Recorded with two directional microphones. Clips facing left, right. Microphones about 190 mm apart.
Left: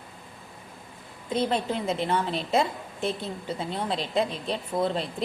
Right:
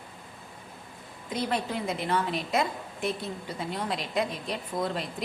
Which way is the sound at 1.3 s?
25° left (ahead or behind).